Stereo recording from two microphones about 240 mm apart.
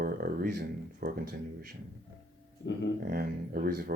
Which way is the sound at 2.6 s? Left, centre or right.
Left.